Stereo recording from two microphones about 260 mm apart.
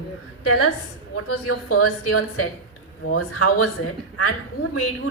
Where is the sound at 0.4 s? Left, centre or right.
Left.